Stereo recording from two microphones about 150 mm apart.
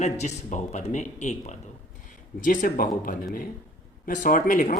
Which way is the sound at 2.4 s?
65° left (ahead or behind).